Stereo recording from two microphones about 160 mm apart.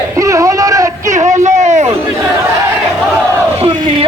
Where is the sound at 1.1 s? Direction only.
50° right (ahead or behind).